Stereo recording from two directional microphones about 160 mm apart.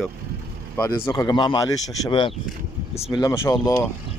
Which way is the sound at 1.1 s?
25° left (ahead or behind).